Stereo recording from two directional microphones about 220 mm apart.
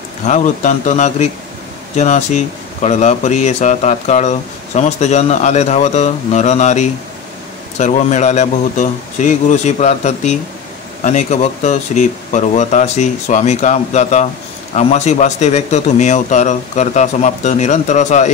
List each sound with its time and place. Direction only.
0.2 s speech: 35° left (ahead or behind)